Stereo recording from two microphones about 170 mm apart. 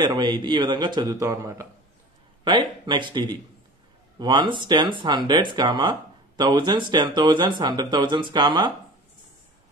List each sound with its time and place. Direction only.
0.0 s speech: 25° right (ahead or behind)
2.4 s speech: 30° right (ahead or behind)